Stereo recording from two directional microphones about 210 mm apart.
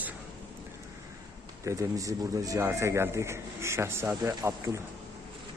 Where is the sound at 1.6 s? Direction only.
15° right (ahead or behind).